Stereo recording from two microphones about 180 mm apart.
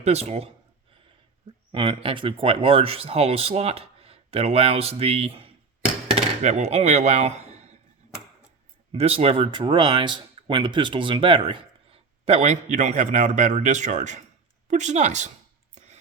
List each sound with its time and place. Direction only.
0.0 s speech: 35° right (ahead or behind)
1.7 s speech: 30° right (ahead or behind)
8.9 s speech: 35° right (ahead or behind)